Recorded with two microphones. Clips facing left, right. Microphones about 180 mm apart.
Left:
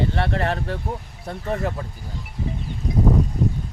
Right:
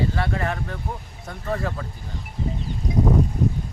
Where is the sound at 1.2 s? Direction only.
20° left (ahead or behind).